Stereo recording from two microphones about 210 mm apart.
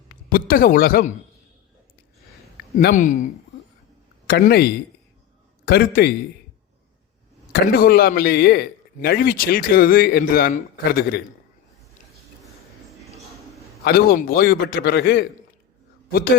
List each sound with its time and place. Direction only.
0.3 s a man's voice: 40° left (ahead or behind)
2.7 s speech: 35° left (ahead or behind)
4.3 s a man's voice: 45° left (ahead or behind)
7.5 s a man's voice: 45° left (ahead or behind)
13.8 s a man's voice: 45° left (ahead or behind)